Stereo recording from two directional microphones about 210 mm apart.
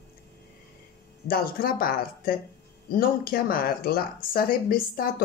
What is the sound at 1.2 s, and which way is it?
Speech, 45° left (ahead or behind).